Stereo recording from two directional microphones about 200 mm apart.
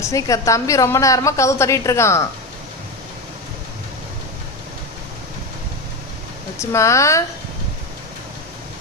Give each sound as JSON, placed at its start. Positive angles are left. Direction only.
{"t": 0.0, "sound": "a woman's voice", "side_deg": 15}
{"t": 6.6, "sound": "a woman's voice", "side_deg": 15}